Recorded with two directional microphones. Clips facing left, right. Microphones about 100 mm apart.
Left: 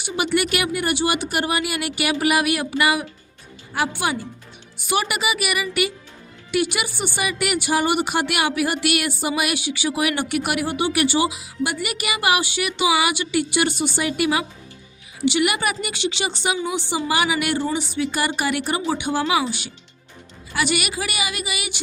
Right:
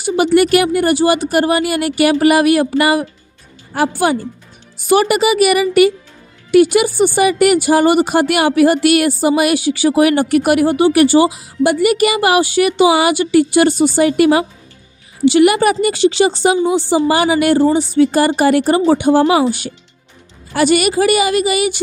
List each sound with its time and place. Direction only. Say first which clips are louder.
0.0 s speech: right 10 dB; 40° right (ahead or behind)